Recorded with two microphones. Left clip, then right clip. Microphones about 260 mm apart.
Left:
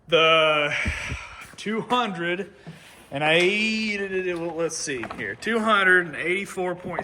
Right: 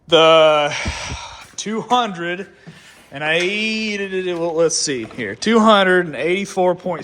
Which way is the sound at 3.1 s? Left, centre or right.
Centre.